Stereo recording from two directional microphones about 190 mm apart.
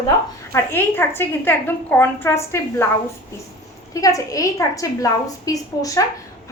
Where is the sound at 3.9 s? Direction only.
15° left (ahead or behind).